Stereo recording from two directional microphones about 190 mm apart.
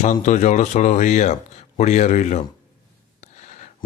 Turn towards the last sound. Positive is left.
turn(degrees=40)  # may be behind; listen again after turning